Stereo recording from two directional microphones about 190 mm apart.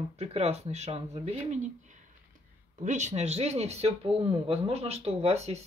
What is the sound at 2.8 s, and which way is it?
Speech, 40° right (ahead or behind).